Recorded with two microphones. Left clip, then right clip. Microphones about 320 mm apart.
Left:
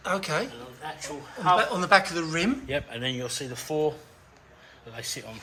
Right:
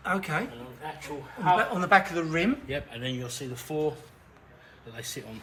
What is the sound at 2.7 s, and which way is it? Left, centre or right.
Speech, left.